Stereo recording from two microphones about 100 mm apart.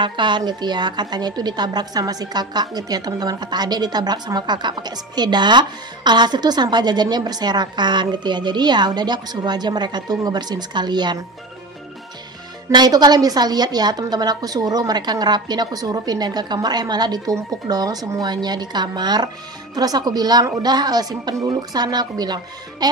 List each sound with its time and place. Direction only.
0.0 s a woman's voice: 50° right (ahead or behind)
12.7 s a woman's voice: 45° right (ahead or behind)